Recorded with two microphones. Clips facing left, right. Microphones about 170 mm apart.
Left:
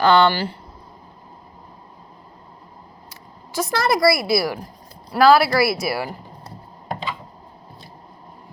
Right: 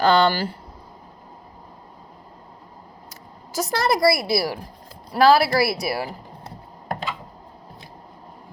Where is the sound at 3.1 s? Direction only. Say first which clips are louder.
Even; 40° right (ahead or behind).